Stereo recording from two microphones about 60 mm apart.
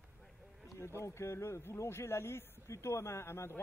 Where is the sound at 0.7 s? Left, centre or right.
Left.